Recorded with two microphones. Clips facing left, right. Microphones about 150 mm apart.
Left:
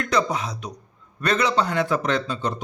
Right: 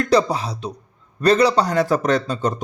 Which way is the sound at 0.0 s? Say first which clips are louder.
Right 5 dB; 35° right (ahead or behind).